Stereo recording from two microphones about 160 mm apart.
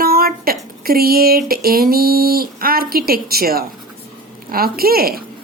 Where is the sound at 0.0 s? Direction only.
70° right (ahead or behind).